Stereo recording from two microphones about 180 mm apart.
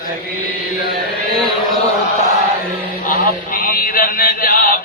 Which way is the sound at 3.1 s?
50° left (ahead or behind).